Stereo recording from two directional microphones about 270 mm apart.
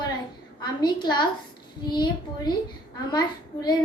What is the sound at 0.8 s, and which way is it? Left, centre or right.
A child's voice, centre.